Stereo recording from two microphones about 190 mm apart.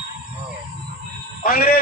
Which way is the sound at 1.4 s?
50° left (ahead or behind).